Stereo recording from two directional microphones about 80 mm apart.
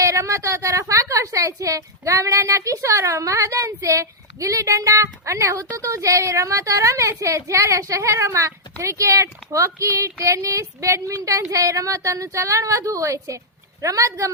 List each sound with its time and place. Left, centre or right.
0.0 s a woman's voice: right